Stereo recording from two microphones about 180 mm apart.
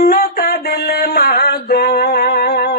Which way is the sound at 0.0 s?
55° left (ahead or behind).